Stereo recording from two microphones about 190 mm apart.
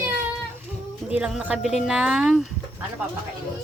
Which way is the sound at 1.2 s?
5° right (ahead or behind).